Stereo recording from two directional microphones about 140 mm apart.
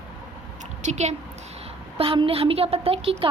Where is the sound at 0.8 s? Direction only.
55° right (ahead or behind).